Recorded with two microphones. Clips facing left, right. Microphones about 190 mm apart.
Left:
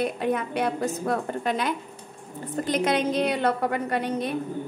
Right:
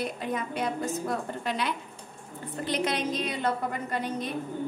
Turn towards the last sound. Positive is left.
turn(degrees=65)  # may be behind; listen again after turning